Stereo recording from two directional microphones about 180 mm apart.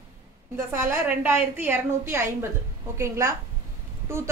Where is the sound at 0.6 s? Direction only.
15° right (ahead or behind).